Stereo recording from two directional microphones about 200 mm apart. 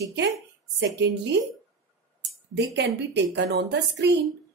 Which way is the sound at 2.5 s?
55° right (ahead or behind).